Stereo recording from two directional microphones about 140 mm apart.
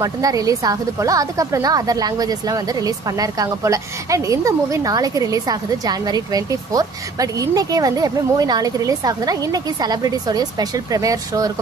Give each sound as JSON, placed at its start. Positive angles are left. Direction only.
{"t": 0.0, "sound": "a woman's voice", "side_deg": -25}